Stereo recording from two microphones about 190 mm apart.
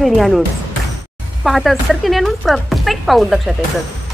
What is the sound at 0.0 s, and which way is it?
Speech, centre (ahead or behind).